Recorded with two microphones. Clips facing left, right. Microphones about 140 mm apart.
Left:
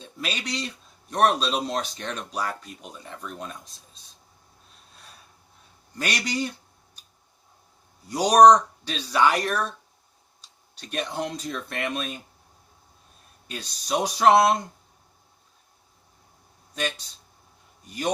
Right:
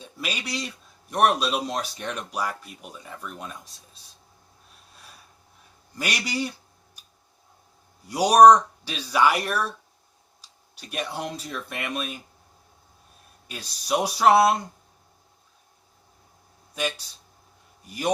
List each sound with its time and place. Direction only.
0.0 s speech: 10° right (ahead or behind)
6.0 s speech: 10° right (ahead or behind)
8.0 s speech: 10° right (ahead or behind)
13.5 s speech: 10° right (ahead or behind)
17.9 s speech: 10° right (ahead or behind)